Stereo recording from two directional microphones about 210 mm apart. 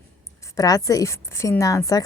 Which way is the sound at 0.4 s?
15° left (ahead or behind).